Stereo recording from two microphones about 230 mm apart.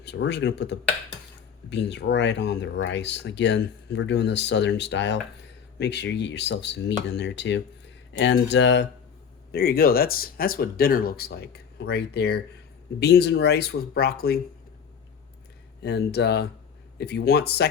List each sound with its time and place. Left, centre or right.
0.0 s speech: left
9.5 s speech: left
15.8 s speech: left